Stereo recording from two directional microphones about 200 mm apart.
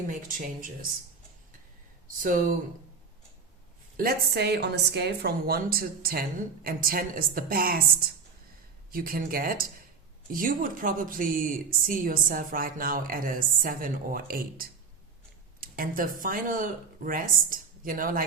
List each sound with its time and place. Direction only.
0.1 s speech: 40° right (ahead or behind)
2.0 s speech: 40° right (ahead or behind)
3.9 s speech: 50° right (ahead or behind)
8.9 s speech: 45° right (ahead or behind)